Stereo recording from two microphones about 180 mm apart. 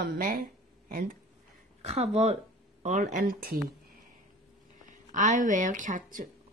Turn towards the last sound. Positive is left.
turn(degrees=-50)  # may be behind; listen again after turning